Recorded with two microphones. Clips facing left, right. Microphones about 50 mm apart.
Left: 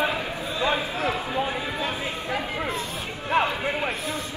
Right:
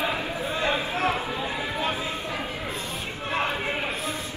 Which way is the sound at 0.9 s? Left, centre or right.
Right.